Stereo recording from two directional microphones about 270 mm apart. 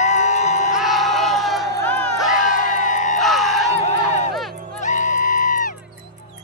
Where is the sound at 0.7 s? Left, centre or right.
Centre.